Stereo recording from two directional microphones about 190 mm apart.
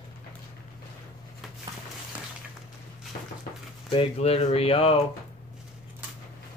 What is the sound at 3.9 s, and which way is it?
Speech, 30° left (ahead or behind).